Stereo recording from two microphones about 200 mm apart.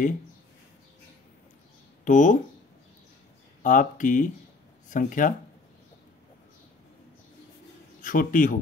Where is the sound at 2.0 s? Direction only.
40° left (ahead or behind).